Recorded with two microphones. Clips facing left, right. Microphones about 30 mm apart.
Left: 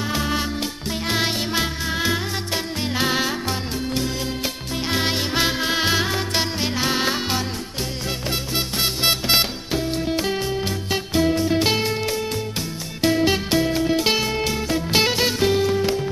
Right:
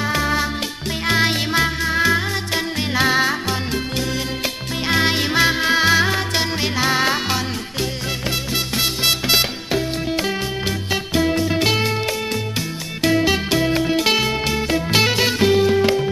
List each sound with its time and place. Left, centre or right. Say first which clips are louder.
0.1 s music: right 3 dB; right
1.5 s music: right 5 dB; right
4.8 s music: right 5 dB; right
6.3 s music: right 2 dB; right
8.5 s music: right 1 dB; right
11.6 s music: right 2 dB; right
13.3 s music: right 2 dB; right